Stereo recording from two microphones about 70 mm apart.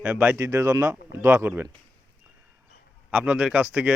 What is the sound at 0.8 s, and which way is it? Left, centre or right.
Speech, right.